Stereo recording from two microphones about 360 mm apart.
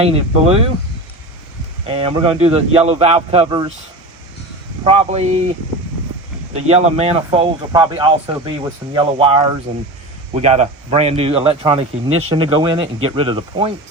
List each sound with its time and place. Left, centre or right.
0.0 s a man's voice: centre
1.9 s a man's voice: centre
4.9 s a man's voice: centre
6.5 s a man's voice: centre